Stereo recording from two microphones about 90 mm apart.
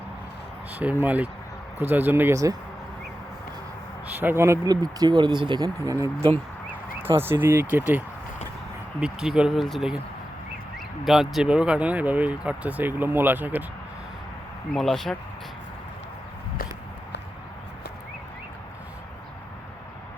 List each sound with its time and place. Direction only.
0.7 s speech: 20° right (ahead or behind)
2.3 s speech: 35° right (ahead or behind)
4.0 s speech: 20° right (ahead or behind)
4.7 s speech: 45° right (ahead or behind)
5.8 s speech: 35° right (ahead or behind)
9.0 s speech: 10° right (ahead or behind)
11.0 s speech: 5° right (ahead or behind); by 13.7 s 20° right (ahead or behind)
14.7 s speech: 5° left (ahead or behind)